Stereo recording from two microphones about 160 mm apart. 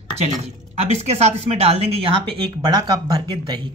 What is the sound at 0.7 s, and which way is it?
Speech, 40° right (ahead or behind).